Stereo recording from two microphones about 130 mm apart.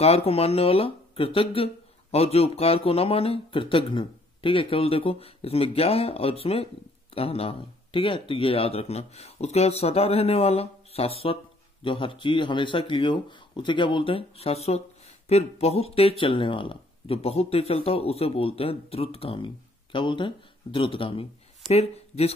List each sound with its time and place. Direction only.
0.0 s speech: 50° left (ahead or behind)